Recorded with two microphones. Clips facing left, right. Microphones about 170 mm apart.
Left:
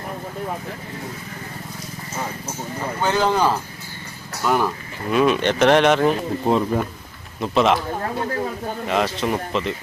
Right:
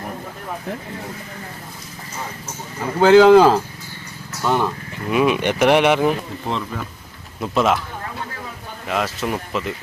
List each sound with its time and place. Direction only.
3.0 s speech: 90° right
4.4 s speech: 5° left (ahead or behind)
5.1 s speech: 10° right (ahead or behind)
6.4 s speech: 40° left (ahead or behind)
7.4 s speech: centre (ahead or behind)
8.9 s speech: centre (ahead or behind)